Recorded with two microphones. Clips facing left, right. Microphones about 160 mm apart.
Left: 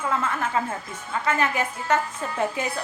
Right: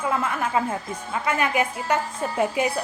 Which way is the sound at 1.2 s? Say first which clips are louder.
Right 1 dB; 15° right (ahead or behind).